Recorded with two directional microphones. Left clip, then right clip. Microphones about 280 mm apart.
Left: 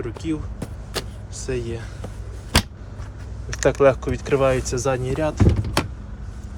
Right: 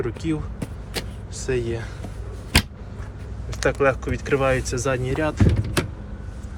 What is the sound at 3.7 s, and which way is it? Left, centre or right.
Speech, centre.